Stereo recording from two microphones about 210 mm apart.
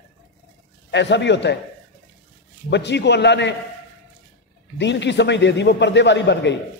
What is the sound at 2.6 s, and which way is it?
Speech, 55° left (ahead or behind).